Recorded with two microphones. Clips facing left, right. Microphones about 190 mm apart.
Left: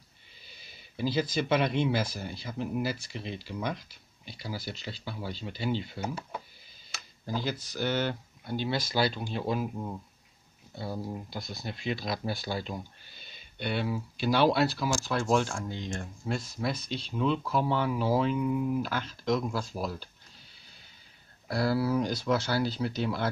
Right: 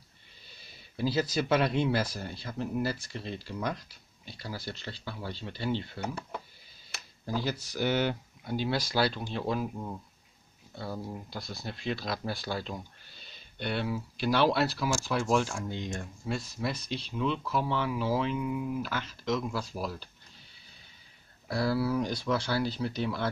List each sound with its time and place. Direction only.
0.9 s speech: 5° right (ahead or behind)
7.7 s speech: 10° right (ahead or behind); by 9.9 s 5° left (ahead or behind)
11.0 s speech: 5° left (ahead or behind)
11.3 s speech: 20° left (ahead or behind)
11.7 s speech: 5° left (ahead or behind)
15.7 s speech: 20° right (ahead or behind)
16.3 s speech: centre (ahead or behind)
21.5 s speech: centre (ahead or behind)